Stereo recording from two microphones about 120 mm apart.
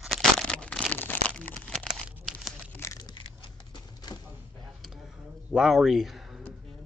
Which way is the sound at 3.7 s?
35° left (ahead or behind).